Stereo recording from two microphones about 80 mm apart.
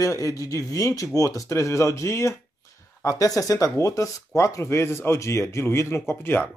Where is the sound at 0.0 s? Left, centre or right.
Left.